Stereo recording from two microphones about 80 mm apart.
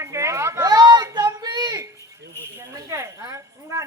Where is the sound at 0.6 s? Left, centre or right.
Right.